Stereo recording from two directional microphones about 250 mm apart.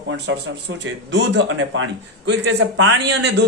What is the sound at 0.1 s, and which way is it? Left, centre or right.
Speech, right.